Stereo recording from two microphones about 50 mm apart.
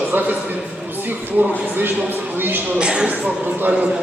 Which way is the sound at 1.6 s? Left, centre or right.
Right.